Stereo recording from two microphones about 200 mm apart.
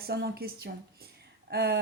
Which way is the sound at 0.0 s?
50° right (ahead or behind).